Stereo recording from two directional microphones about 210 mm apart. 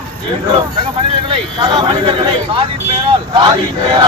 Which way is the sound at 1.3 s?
25° right (ahead or behind).